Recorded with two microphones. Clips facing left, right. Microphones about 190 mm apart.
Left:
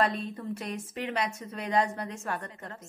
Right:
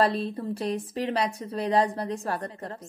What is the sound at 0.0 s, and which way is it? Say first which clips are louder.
A woman's voice: right 4 dB; 35° right (ahead or behind).